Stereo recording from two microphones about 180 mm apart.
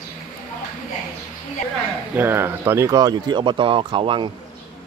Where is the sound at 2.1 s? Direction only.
10° right (ahead or behind).